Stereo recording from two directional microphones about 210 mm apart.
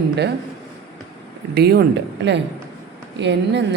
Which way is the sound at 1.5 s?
50° right (ahead or behind).